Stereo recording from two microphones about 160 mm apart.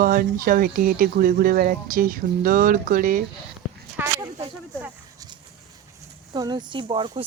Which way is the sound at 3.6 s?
10° right (ahead or behind).